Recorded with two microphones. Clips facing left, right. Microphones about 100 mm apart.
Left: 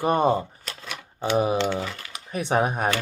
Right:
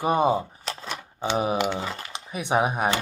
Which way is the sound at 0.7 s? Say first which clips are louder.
Right 8 dB; 35° right (ahead or behind).